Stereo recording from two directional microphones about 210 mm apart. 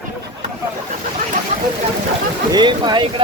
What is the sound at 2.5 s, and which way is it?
Speech, 20° right (ahead or behind).